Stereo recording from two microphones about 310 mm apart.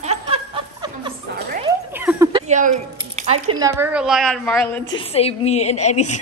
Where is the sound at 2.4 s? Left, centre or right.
Right.